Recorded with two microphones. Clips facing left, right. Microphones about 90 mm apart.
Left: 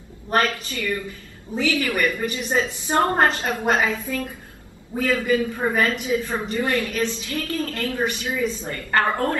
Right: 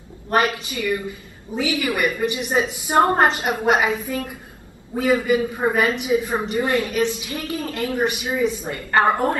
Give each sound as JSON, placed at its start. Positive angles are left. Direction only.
{"t": 0.3, "sound": "a woman's voice", "side_deg": -15}